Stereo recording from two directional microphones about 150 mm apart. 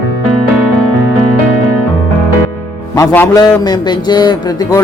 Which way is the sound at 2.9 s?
15° left (ahead or behind).